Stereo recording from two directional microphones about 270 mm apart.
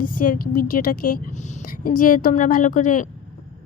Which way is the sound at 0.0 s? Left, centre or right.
Left.